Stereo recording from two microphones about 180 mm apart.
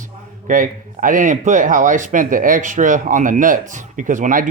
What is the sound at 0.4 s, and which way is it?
Speech, 50° right (ahead or behind).